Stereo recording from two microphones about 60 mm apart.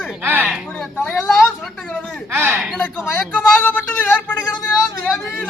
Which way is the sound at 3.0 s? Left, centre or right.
Left.